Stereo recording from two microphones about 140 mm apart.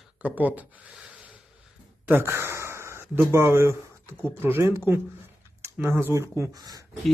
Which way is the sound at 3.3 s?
20° right (ahead or behind).